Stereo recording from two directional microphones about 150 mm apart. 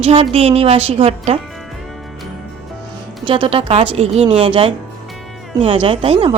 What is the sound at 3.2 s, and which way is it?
Speech, 35° right (ahead or behind).